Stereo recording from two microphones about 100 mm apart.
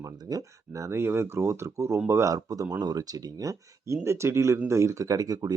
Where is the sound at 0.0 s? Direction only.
35° right (ahead or behind).